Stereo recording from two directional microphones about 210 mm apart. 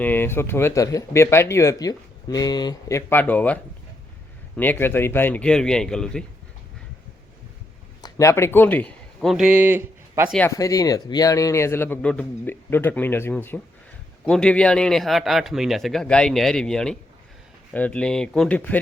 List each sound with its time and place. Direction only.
0.0 s speech: 10° left (ahead or behind)
8.0 s a man's voice: 15° left (ahead or behind); by 10.3 s 10° right (ahead or behind)
10.3 s speech: 10° left (ahead or behind)